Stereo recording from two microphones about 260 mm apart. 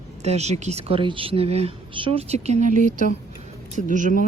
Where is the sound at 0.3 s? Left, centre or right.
Right.